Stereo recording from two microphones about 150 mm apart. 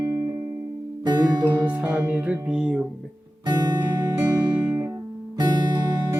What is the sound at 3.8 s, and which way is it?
Music, 15° right (ahead or behind).